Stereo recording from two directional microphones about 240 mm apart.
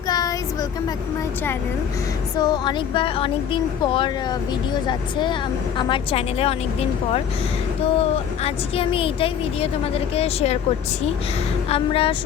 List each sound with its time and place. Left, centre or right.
0.1 s a sound: centre
2.3 s speech: centre
11.7 s speech: left